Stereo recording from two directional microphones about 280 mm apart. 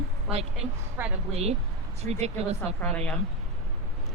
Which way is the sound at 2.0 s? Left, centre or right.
Right.